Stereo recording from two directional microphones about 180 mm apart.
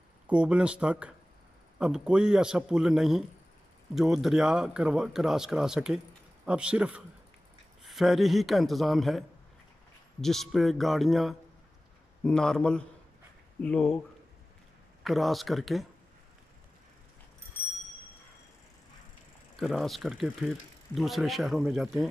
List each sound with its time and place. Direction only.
0.3 s speech: 5° right (ahead or behind)
10.2 s speech: centre (ahead or behind)
15.0 s speech: centre (ahead or behind)
19.6 s speech: centre (ahead or behind)